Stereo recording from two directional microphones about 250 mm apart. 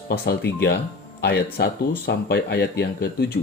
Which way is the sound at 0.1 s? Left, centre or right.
Left.